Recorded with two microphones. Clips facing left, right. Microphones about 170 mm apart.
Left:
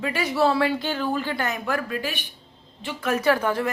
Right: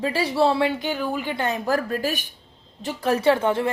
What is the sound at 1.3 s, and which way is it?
A woman's voice, 30° right (ahead or behind).